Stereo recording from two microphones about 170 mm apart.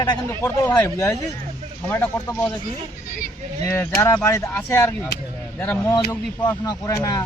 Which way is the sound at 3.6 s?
15° left (ahead or behind).